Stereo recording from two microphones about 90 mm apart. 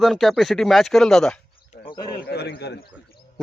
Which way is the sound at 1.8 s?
60° left (ahead or behind).